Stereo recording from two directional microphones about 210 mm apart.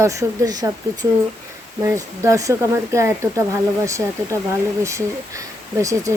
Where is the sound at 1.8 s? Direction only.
15° right (ahead or behind).